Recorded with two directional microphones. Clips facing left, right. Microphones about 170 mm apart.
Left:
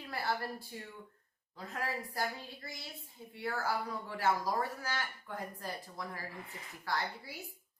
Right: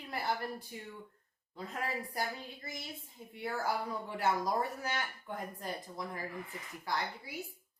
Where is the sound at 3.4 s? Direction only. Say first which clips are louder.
Right 1 dB; 20° right (ahead or behind).